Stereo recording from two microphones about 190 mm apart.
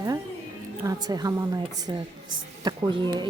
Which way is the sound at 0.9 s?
20° right (ahead or behind).